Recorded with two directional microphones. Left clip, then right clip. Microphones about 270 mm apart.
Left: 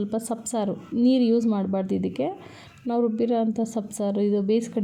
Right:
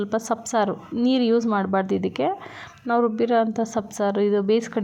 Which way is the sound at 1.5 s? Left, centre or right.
Right.